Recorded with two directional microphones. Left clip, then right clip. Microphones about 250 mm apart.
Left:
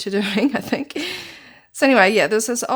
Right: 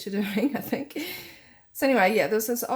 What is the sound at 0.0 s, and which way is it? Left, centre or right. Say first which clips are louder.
Speech: left 8 dB; left.